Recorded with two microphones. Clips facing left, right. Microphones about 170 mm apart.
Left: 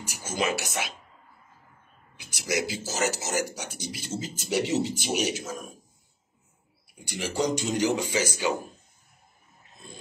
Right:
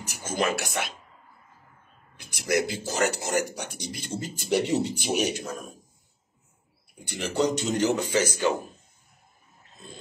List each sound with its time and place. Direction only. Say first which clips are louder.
0.0 s speech: right 2 dB; 10° left (ahead or behind)
2.1 s a man's voice: right 4 dB; 60° right (ahead or behind)
2.6 s speech: right 2 dB; 5° left (ahead or behind)
7.2 s speech: right 2 dB; 10° left (ahead or behind)